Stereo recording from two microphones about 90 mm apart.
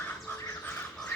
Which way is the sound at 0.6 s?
20° left (ahead or behind).